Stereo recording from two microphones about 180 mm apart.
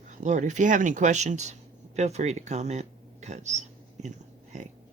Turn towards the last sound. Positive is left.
turn(degrees=-40)  # may be behind; listen again after turning